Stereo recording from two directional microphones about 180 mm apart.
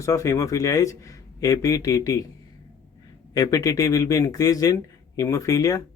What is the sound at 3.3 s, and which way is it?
Speech, 20° left (ahead or behind).